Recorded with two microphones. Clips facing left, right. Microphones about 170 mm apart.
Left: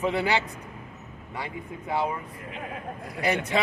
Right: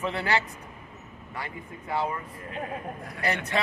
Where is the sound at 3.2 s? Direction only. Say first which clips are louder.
Left 3 dB; 15° left (ahead or behind).